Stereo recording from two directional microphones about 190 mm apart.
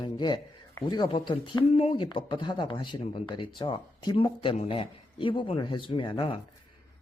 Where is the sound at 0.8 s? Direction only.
25° left (ahead or behind).